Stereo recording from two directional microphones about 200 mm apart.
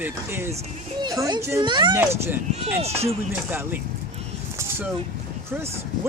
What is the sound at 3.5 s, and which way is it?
Speech, 10° right (ahead or behind).